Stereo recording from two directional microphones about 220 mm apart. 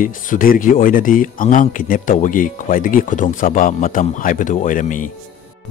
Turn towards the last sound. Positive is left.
turn(degrees=35)  # may be behind; listen again after turning